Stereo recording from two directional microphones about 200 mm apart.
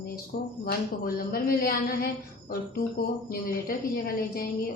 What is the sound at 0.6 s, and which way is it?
A woman's voice, 45° left (ahead or behind).